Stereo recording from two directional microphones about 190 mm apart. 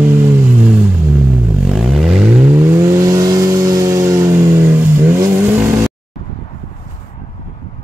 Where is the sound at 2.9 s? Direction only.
15° right (ahead or behind).